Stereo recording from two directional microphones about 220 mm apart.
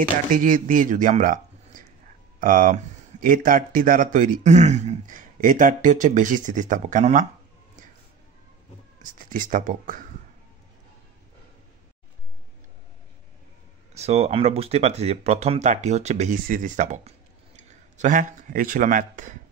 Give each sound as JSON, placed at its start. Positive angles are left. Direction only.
{"t": 0.3, "sound": "speech", "side_deg": -40}
{"t": 9.2, "sound": "speech", "side_deg": -35}
{"t": 13.9, "sound": "speech", "side_deg": -30}